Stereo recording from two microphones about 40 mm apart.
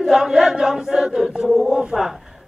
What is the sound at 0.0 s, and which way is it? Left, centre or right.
Chant, centre.